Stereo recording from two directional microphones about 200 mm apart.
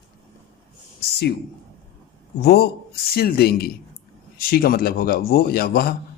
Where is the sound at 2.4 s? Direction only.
50° left (ahead or behind).